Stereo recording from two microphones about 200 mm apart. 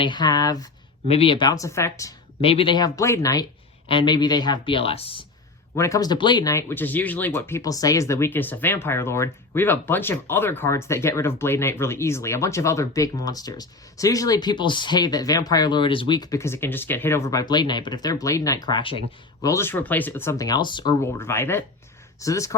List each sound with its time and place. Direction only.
0.0 s speech: 20° left (ahead or behind)
1.0 s speech: 30° left (ahead or behind)
2.4 s speech: 30° left (ahead or behind)
5.7 s speech: 15° left (ahead or behind)